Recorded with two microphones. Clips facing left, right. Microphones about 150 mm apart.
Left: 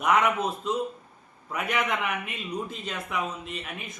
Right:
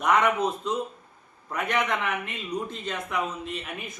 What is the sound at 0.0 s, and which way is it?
A man's voice, 5° left (ahead or behind).